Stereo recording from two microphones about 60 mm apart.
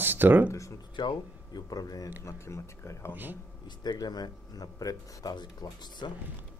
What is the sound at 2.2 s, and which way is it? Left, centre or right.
Speech, left.